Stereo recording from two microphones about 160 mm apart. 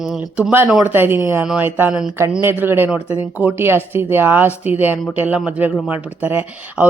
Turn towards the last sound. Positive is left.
turn(degrees=-10)  # may be behind; listen again after turning